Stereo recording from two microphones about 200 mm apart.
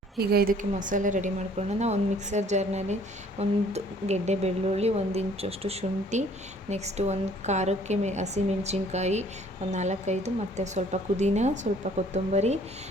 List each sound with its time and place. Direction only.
0.2 s a woman's voice: 45° right (ahead or behind)